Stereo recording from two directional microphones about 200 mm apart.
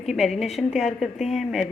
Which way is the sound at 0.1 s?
Centre (ahead or behind).